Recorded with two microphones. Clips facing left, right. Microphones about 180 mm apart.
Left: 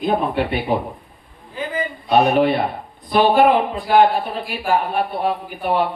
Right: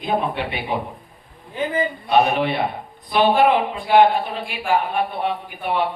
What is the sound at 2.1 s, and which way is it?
Speech, 40° left (ahead or behind).